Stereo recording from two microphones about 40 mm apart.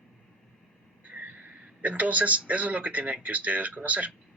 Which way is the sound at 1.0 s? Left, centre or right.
Right.